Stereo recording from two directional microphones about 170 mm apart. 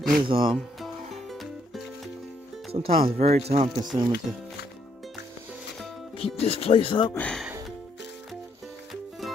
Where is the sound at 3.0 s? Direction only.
40° right (ahead or behind).